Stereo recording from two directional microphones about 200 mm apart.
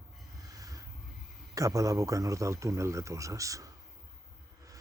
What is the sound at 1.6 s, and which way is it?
A man's voice, 15° right (ahead or behind).